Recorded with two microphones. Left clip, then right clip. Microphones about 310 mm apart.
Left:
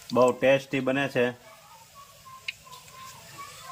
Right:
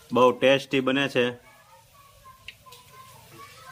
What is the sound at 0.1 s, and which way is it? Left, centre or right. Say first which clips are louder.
Speech: right 2 dB; centre.